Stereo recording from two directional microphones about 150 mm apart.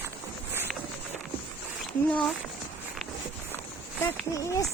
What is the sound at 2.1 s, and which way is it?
Speech, 5° left (ahead or behind).